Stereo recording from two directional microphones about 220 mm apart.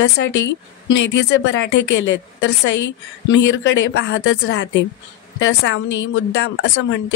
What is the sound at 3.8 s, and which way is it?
A woman's voice, 55° left (ahead or behind).